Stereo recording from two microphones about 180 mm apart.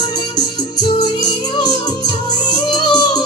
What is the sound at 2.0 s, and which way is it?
Music, 25° left (ahead or behind).